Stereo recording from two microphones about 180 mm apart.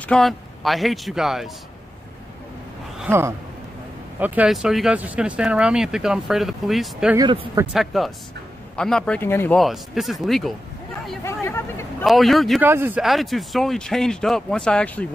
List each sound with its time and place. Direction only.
0.0 s speech: 5° left (ahead or behind)
3.0 s speech: 15° right (ahead or behind)
7.2 s speech: 25° right (ahead or behind)
7.7 s speech: centre (ahead or behind)
9.6 s speech: centre (ahead or behind)
11.2 s speech: 15° left (ahead or behind)
12.0 s speech: centre (ahead or behind)
12.6 s speech: 10° right (ahead or behind); by 15.0 s 5° left (ahead or behind)